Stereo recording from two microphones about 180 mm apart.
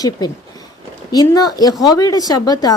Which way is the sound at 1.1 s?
20° left (ahead or behind).